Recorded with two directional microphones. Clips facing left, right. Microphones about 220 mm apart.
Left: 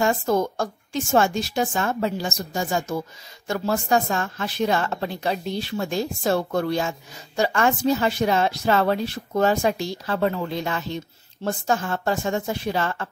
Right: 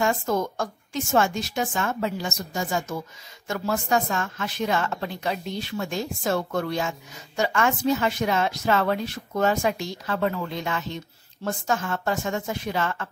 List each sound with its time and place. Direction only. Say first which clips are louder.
0.0 s speech: left 3 dB; 35° left (ahead or behind)